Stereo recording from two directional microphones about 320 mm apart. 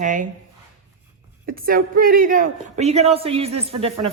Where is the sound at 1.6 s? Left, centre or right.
Right.